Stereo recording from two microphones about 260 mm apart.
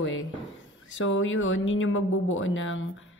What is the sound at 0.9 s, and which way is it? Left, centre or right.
A woman's voice, left.